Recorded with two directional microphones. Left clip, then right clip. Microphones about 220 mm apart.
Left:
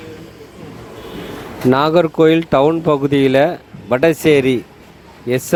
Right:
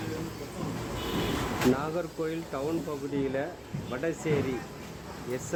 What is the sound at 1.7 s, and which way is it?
Speech, 45° left (ahead or behind).